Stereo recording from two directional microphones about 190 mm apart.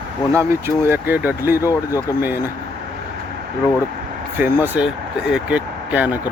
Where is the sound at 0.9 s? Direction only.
10° right (ahead or behind).